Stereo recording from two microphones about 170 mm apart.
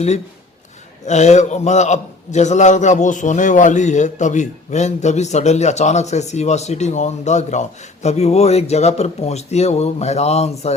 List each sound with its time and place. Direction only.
1.0 s a man's voice: 40° left (ahead or behind)